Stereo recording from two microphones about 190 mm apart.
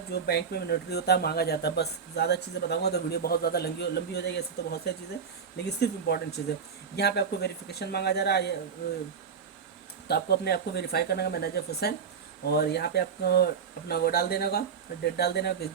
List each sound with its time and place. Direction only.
0.1 s speech: 55° left (ahead or behind)
10.1 s speech: 55° left (ahead or behind)